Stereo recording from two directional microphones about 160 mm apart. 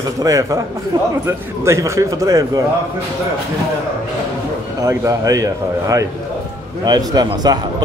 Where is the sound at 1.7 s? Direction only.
20° right (ahead or behind).